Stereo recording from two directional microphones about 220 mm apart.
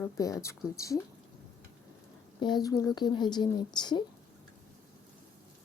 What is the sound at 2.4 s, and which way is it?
Speech, 20° left (ahead or behind).